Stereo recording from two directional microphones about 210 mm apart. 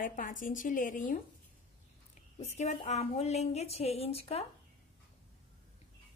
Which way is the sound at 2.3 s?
35° left (ahead or behind).